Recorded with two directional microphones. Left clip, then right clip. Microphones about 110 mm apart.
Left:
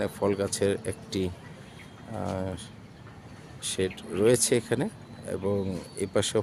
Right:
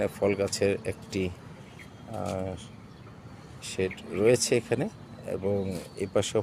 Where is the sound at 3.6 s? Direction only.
35° left (ahead or behind).